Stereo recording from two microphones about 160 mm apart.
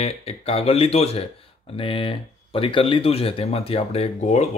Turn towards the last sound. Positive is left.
turn(degrees=40)  # may be behind; listen again after turning